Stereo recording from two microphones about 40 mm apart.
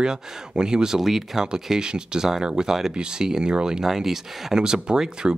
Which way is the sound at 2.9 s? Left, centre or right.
Centre.